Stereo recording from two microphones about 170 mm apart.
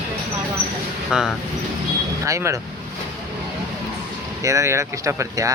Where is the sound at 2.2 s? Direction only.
20° right (ahead or behind).